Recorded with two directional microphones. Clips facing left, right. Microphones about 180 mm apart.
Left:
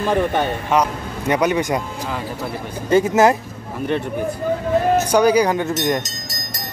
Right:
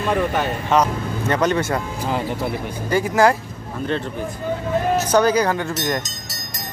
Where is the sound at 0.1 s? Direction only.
30° left (ahead or behind).